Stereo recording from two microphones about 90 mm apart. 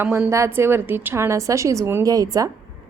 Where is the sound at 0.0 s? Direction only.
25° right (ahead or behind).